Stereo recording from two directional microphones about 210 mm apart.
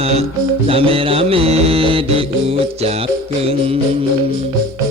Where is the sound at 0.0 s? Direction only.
30° right (ahead or behind).